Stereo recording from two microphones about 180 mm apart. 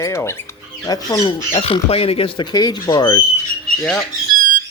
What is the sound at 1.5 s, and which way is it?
Speech, 35° left (ahead or behind).